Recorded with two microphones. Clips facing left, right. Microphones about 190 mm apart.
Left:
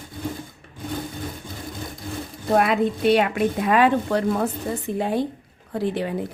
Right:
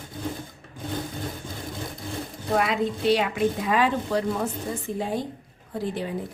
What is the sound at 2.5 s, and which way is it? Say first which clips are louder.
A woman's voice: left 5 dB; 55° left (ahead or behind).